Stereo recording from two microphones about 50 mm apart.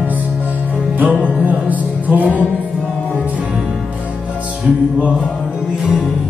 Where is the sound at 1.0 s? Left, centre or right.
Right.